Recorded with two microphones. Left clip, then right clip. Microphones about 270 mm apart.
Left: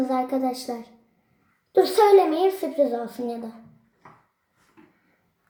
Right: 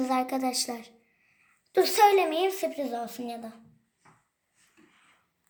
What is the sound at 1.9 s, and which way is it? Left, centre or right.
A child's voice, right.